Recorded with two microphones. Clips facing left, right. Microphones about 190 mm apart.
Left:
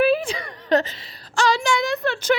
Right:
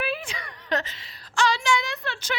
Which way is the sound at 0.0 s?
35° left (ahead or behind).